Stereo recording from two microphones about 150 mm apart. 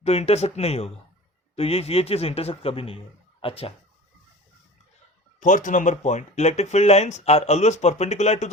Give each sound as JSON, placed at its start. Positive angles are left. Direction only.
{"t": 0.0, "sound": "a man's voice", "side_deg": 45}
{"t": 5.4, "sound": "speech", "side_deg": 55}